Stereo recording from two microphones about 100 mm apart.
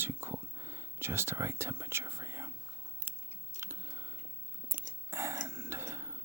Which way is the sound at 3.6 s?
30° right (ahead or behind).